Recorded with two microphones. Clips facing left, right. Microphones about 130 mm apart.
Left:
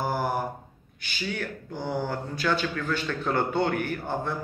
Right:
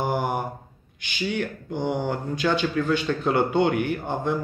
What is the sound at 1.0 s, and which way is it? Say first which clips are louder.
A man's voice: right 5 dB; 20° right (ahead or behind).